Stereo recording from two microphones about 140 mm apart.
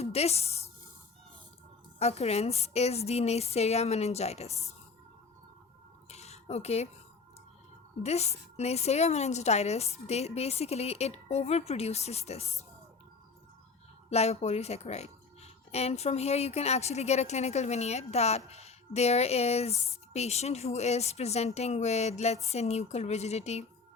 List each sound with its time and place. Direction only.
0.0 s speech: 50° left (ahead or behind)
2.0 s a woman's voice: 50° left (ahead or behind)
6.1 s a sound: 50° left (ahead or behind)
8.0 s a woman's voice: 50° left (ahead or behind)
14.1 s a woman's voice: 50° left (ahead or behind)